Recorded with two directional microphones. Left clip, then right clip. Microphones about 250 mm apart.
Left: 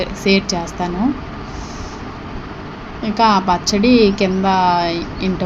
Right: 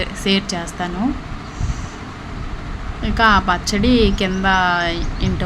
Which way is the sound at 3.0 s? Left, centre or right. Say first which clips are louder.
Left 1 dB; centre.